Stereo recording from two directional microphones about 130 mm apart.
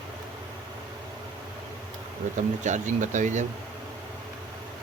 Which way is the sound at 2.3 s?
70° right (ahead or behind).